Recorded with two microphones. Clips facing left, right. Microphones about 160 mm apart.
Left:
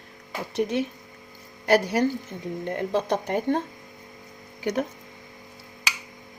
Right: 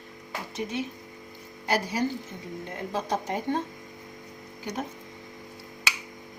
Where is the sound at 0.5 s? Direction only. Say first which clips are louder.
Left 7 dB; 60° left (ahead or behind).